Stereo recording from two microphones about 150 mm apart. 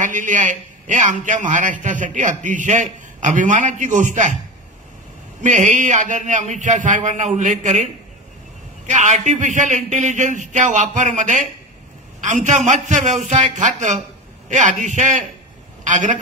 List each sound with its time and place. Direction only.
0.0 s a man's voice: 55° right (ahead or behind)
5.4 s a man's voice: 55° right (ahead or behind)